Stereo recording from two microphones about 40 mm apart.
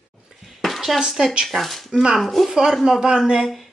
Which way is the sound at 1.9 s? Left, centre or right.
Centre.